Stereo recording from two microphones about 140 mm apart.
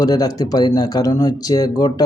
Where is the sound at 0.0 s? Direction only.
25° left (ahead or behind).